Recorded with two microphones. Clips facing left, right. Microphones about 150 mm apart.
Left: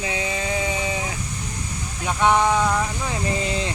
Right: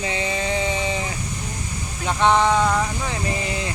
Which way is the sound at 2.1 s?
10° left (ahead or behind).